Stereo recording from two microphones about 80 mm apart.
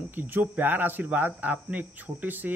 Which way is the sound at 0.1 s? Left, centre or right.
Right.